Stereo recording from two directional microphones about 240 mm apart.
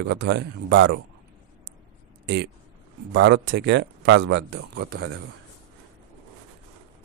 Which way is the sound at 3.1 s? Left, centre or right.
Right.